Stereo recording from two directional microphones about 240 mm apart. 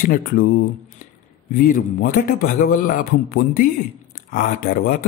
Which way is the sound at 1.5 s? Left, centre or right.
Left.